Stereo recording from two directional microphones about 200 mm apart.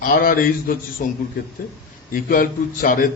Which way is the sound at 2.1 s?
45° left (ahead or behind).